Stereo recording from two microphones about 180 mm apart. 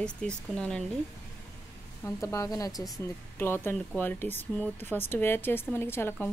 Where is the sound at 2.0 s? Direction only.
15° left (ahead or behind).